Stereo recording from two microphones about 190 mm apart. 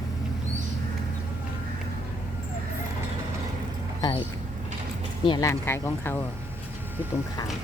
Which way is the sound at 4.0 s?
20° left (ahead or behind).